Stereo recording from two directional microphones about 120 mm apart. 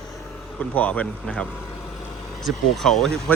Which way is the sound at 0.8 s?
10° left (ahead or behind).